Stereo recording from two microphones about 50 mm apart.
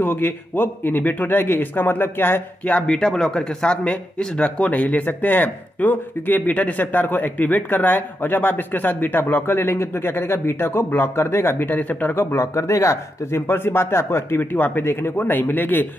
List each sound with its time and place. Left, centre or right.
0.0 s a man's voice: left
2.9 s speech: centre; by 12.2 s left
12.2 s a man's voice: left
12.5 s speech: left
13.5 s a man's voice: left
14.5 s a man's voice: left